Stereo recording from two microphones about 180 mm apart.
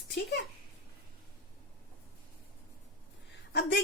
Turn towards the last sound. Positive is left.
turn(degrees=70)  # may be behind; listen again after turning